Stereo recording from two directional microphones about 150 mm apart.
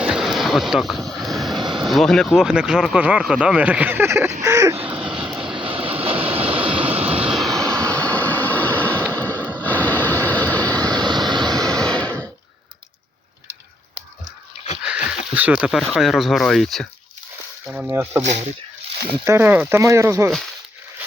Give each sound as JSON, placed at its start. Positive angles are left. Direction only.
{"t": 0.0, "sound": "vehicle", "side_deg": -5}
{"t": 1.6, "sound": "vehicle", "side_deg": -30}
{"t": 1.9, "sound": "speech", "side_deg": 0}
{"t": 4.8, "sound": "vehicle", "side_deg": -5}
{"t": 5.6, "sound": "vehicle", "side_deg": -40}
{"t": 6.8, "sound": "vehicle", "side_deg": -10}
{"t": 7.8, "sound": "a sound", "side_deg": 10}
{"t": 9.2, "sound": "vehicle", "side_deg": 10}
{"t": 10.8, "sound": "vehicle", "side_deg": -25}
{"t": 11.7, "sound": "a sound", "side_deg": 5}
{"t": 14.8, "sound": "a sound", "side_deg": -10}
{"t": 15.9, "sound": "speech", "side_deg": 0}
{"t": 17.7, "sound": "speech", "side_deg": -10}
{"t": 19.2, "sound": "speech", "side_deg": -15}